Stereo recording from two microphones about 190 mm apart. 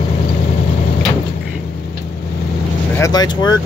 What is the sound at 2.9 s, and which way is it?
Vehicle, 20° left (ahead or behind).